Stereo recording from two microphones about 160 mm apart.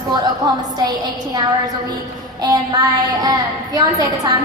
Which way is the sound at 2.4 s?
20° right (ahead or behind).